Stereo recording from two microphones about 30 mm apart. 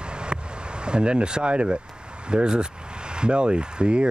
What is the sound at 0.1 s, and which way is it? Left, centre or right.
Vehicle, right.